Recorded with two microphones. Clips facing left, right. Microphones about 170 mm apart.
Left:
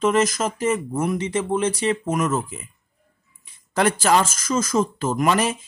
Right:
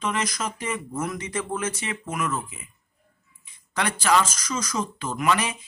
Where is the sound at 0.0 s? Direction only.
45° left (ahead or behind).